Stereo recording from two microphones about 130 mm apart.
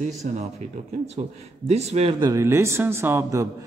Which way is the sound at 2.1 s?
30° right (ahead or behind).